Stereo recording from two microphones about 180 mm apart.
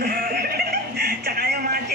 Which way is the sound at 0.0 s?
55° right (ahead or behind).